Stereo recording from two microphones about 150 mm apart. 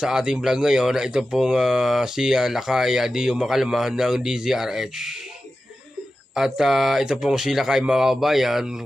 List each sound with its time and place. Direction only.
0.0 s speech: 5° right (ahead or behind)
6.3 s speech: centre (ahead or behind)